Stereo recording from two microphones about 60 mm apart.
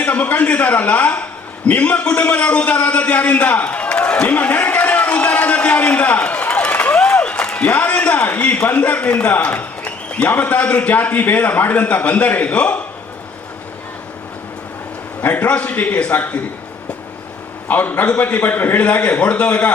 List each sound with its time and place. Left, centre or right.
0.0 s a man's voice: left
7.1 s applause: left
7.6 s a man's voice: left
15.2 s a man's voice: left
17.7 s a man's voice: left